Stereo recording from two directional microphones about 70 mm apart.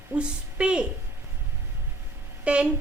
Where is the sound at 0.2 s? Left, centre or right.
Centre.